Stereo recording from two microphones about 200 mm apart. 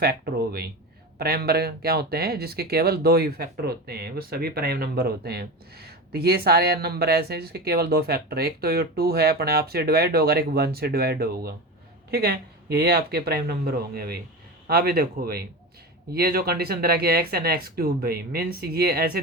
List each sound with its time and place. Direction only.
0.0 s speech: 50° right (ahead or behind)